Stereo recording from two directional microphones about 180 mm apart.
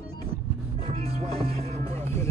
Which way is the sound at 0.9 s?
35° right (ahead or behind).